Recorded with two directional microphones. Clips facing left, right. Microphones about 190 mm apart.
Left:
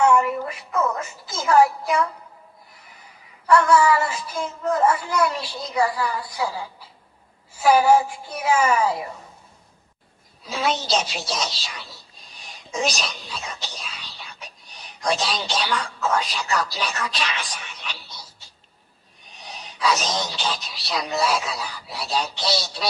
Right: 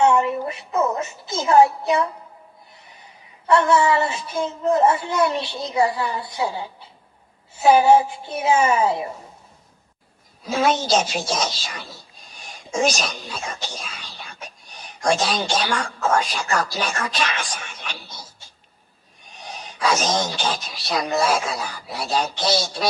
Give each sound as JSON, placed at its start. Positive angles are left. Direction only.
{"t": 0.0, "sound": "a woman's voice", "side_deg": -25}
{"t": 10.4, "sound": "speech", "side_deg": -50}